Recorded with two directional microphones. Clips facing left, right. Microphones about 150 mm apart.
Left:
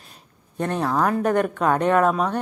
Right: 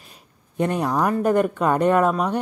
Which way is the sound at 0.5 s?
15° right (ahead or behind).